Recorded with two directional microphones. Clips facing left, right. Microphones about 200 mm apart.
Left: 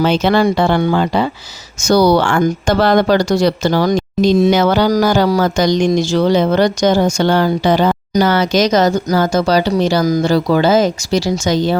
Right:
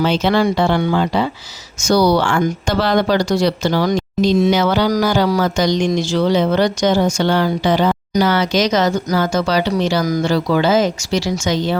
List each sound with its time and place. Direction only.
0.0 s speech: 50° left (ahead or behind)